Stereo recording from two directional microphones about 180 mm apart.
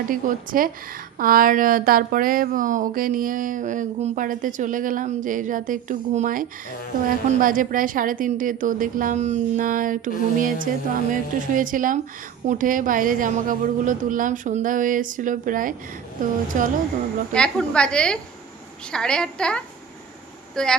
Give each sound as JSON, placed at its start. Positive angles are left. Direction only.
{"t": 0.1, "sound": "speech", "side_deg": -50}
{"t": 17.3, "sound": "a woman's voice", "side_deg": 5}